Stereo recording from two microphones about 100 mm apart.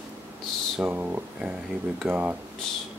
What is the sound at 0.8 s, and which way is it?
Speech, 15° right (ahead or behind).